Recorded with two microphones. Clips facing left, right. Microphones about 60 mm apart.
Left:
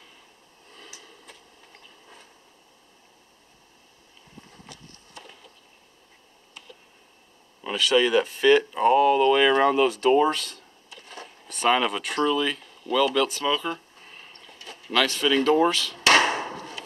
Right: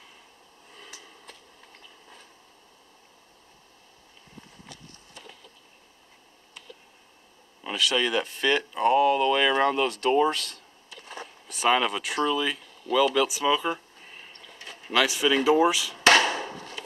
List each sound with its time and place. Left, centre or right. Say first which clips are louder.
0.7 s a sound: even; centre
7.6 s speech: left 4 dB; centre
16.2 s chop: left 2 dB; left